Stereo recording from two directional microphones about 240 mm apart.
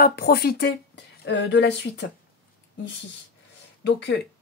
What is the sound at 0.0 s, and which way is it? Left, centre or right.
Speech, left.